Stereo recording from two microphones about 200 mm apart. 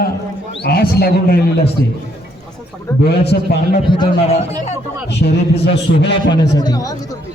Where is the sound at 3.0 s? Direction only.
55° left (ahead or behind).